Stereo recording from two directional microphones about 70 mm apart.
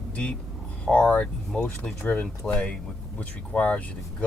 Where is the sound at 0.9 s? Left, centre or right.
Centre.